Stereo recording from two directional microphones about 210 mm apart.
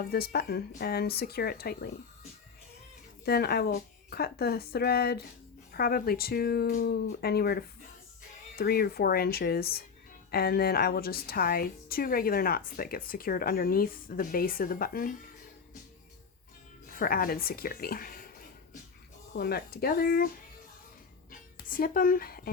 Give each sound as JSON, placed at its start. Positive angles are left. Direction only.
{"t": 0.1, "sound": "a woman's voice", "side_deg": 45}
{"t": 3.2, "sound": "a woman's voice", "side_deg": 50}
{"t": 16.9, "sound": "a woman's voice", "side_deg": 45}
{"t": 19.3, "sound": "a woman's voice", "side_deg": 50}
{"t": 21.2, "sound": "music", "side_deg": 40}